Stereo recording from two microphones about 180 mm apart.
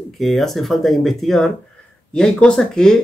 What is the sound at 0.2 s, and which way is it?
Speech, centre (ahead or behind).